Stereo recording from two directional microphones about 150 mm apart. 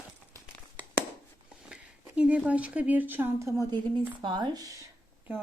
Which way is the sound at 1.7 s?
10° right (ahead or behind).